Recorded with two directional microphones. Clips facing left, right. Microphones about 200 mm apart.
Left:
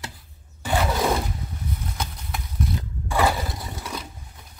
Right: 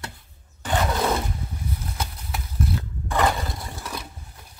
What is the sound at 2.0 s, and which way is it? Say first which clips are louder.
Clip-clop: even; 5° right (ahead or behind).